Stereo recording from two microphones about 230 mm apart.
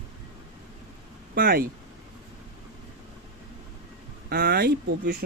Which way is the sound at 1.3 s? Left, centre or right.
Right.